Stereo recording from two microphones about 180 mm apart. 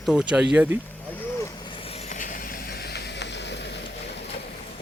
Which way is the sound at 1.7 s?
35° left (ahead or behind).